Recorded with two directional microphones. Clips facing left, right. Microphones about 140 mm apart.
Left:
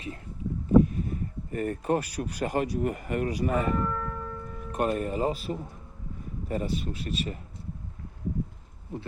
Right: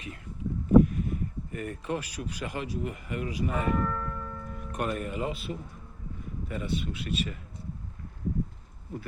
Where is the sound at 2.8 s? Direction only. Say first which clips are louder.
Left 5 dB; 50° left (ahead or behind).